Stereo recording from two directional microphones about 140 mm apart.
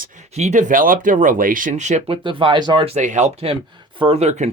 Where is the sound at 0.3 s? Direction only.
55° right (ahead or behind).